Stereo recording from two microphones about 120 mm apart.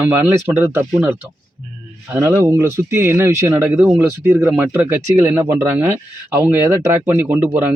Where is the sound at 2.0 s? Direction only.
20° right (ahead or behind).